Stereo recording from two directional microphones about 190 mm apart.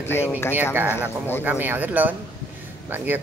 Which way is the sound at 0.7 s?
10° right (ahead or behind).